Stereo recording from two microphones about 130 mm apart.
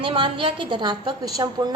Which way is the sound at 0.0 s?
40° right (ahead or behind).